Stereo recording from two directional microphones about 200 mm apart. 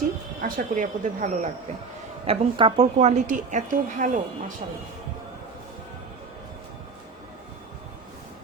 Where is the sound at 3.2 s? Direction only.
40° right (ahead or behind).